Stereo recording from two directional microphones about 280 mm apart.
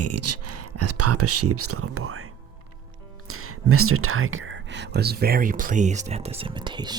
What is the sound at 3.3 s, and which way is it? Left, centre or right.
Speech, right.